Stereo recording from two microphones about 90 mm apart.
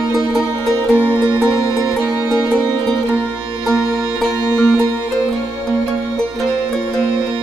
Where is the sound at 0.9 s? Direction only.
20° right (ahead or behind).